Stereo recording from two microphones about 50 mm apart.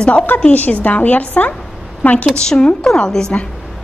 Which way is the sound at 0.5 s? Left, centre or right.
Left.